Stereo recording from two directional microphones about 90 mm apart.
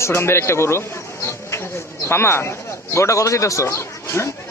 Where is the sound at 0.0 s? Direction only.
30° left (ahead or behind).